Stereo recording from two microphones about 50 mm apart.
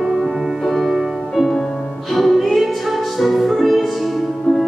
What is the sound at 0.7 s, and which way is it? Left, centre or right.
Music, centre.